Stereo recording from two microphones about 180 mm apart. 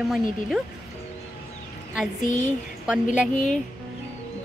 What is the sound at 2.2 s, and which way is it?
Speech, 45° left (ahead or behind).